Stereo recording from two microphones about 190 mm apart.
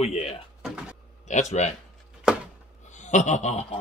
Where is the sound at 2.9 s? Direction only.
40° left (ahead or behind).